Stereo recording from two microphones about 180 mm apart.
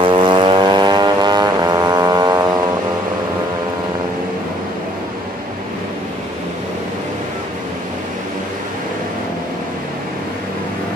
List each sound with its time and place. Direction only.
0.0 s vehicle: 25° right (ahead or behind)